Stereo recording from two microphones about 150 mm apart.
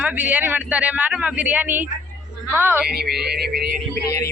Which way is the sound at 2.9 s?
90° right.